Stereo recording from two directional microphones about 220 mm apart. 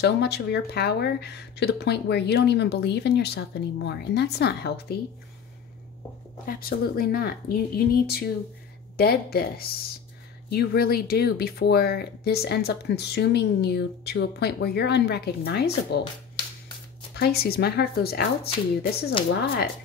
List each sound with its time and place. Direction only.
0.0 s speech: 50° left (ahead or behind)
6.4 s speech: 40° left (ahead or behind)
17.1 s speech: 45° left (ahead or behind)